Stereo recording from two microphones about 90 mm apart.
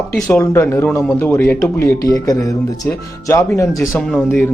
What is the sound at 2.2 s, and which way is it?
Speech, 40° left (ahead or behind).